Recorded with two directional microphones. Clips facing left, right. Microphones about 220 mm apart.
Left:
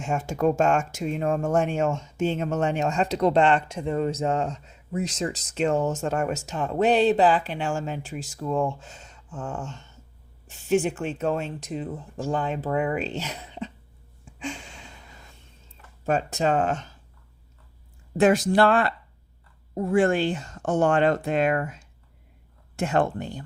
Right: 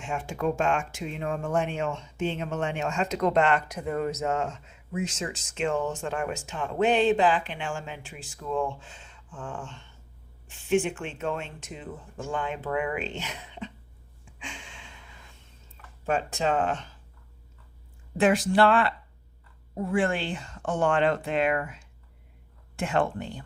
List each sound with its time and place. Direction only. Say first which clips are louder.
0.0 s speech: left 5 dB; 45° left (ahead or behind)
14.3 s a sound: left 9 dB; 40° left (ahead or behind)
16.0 s speech: left 3 dB; 40° left (ahead or behind)
18.2 s speech: left 3 dB; 40° left (ahead or behind)